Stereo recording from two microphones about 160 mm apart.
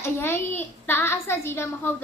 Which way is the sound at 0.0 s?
15° left (ahead or behind).